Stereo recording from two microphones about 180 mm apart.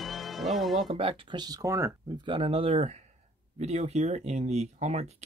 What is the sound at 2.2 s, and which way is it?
Speech, 30° right (ahead or behind).